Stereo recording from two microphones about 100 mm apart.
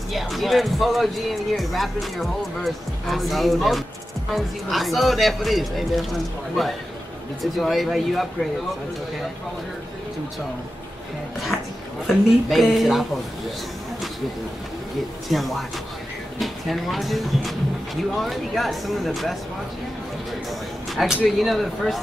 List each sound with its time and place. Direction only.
0.1 s speech: centre (ahead or behind)
12.1 s speech: centre (ahead or behind)
15.2 s speech: centre (ahead or behind)
20.9 s speech: centre (ahead or behind)